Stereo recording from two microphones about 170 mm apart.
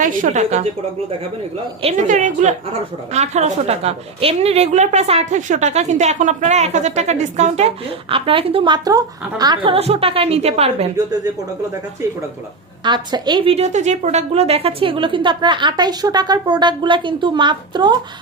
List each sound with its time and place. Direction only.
0.0 s a woman's voice: 50° right (ahead or behind)
1.8 s a woman's voice: 40° right (ahead or behind)
12.8 s a woman's voice: 25° right (ahead or behind)